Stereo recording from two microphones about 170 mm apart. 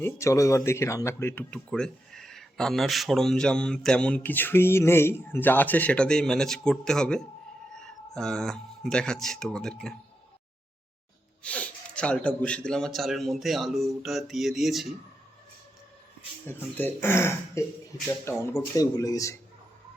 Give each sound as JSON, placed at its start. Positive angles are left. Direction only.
{"t": 0.0, "sound": "speech", "side_deg": 15}
{"t": 11.4, "sound": "speech", "side_deg": 5}
{"t": 16.5, "sound": "speech", "side_deg": 10}